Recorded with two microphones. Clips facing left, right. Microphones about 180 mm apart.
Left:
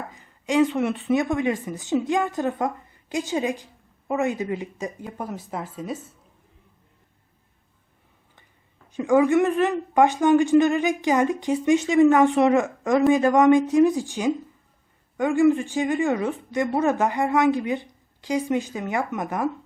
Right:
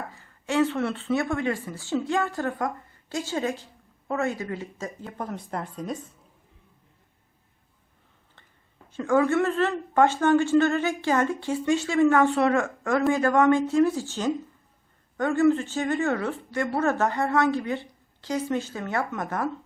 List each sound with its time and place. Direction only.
0.1 s a woman's voice: 15° left (ahead or behind)
8.9 s a woman's voice: 15° left (ahead or behind)